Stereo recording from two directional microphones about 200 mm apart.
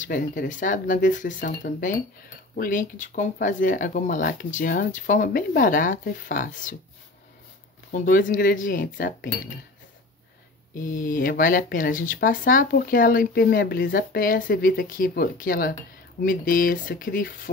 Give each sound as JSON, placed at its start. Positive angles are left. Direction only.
{"t": 0.0, "sound": "speech", "side_deg": 40}
{"t": 7.9, "sound": "speech", "side_deg": 40}
{"t": 10.7, "sound": "speech", "side_deg": 45}